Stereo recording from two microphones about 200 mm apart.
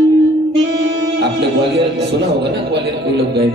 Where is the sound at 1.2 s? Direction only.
55° right (ahead or behind).